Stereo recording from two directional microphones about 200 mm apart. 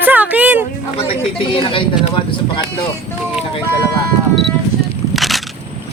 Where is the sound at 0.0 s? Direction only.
10° right (ahead or behind).